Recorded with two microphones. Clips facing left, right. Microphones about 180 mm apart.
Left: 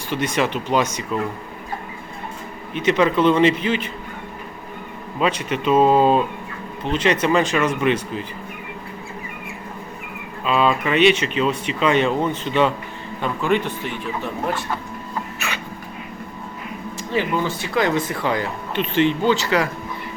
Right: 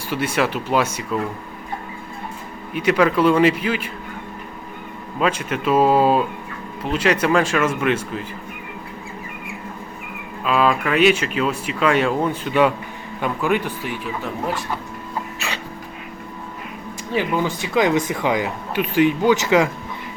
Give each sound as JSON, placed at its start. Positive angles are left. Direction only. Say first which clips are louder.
{"t": 0.1, "sound": "speech", "louder": "even", "side_deg": -10}
{"t": 2.7, "sound": "speech", "louder": "right 1 dB", "side_deg": -5}
{"t": 5.2, "sound": "speech", "louder": "even", "side_deg": -5}
{"t": 10.4, "sound": "speech", "louder": "even", "side_deg": 0}
{"t": 15.4, "sound": "hiccup", "louder": "even", "side_deg": -30}
{"t": 17.2, "sound": "speech", "louder": "right 1 dB", "side_deg": -15}